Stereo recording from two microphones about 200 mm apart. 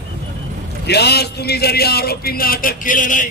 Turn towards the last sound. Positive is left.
turn(degrees=40)  # may be behind; listen again after turning